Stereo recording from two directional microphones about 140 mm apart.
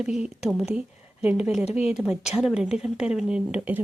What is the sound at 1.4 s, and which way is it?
Speech, 5° right (ahead or behind).